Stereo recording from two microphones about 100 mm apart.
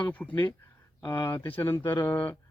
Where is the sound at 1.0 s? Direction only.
25° left (ahead or behind).